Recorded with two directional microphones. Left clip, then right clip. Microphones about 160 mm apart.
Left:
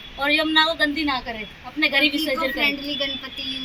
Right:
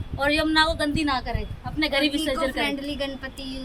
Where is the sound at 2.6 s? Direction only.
20° right (ahead or behind).